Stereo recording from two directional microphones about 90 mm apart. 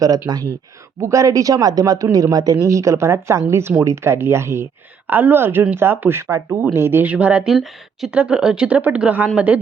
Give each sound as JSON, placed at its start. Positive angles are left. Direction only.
{"t": 0.3, "sound": "speech", "side_deg": -50}
{"t": 0.9, "sound": "speech", "side_deg": -35}
{"t": 7.4, "sound": "speech", "side_deg": 0}